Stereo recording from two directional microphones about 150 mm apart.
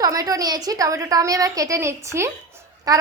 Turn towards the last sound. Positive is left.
turn(degrees=-25)  # may be behind; listen again after turning